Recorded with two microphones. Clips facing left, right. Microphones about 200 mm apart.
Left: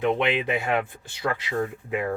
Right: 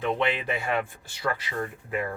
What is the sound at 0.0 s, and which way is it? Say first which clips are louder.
A man's voice: left 3 dB; 15° left (ahead or behind).